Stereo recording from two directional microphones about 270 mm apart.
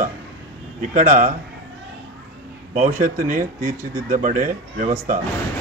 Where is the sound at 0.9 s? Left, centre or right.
Right.